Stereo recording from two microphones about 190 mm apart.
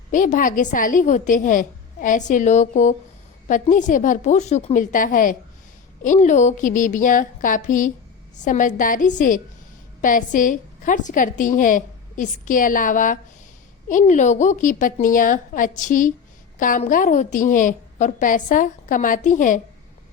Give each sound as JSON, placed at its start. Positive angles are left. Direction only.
{"t": 0.1, "sound": "a woman's voice", "side_deg": 40}